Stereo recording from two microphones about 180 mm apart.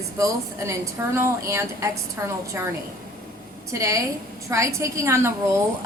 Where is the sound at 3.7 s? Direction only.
15° right (ahead or behind).